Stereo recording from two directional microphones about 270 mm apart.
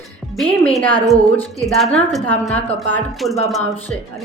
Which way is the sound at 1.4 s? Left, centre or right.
Centre.